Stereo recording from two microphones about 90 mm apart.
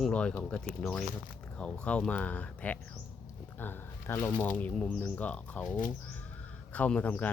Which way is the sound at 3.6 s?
25° left (ahead or behind).